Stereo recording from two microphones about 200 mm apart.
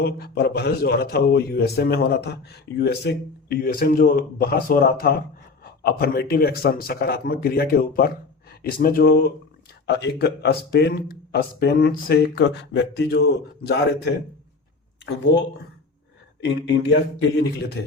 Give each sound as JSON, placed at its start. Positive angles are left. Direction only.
{"t": 0.0, "sound": "a man's voice", "side_deg": 50}
{"t": 16.6, "sound": "speech", "side_deg": 60}